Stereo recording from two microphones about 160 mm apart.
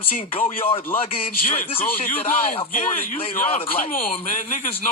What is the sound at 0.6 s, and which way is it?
Speech, 65° left (ahead or behind).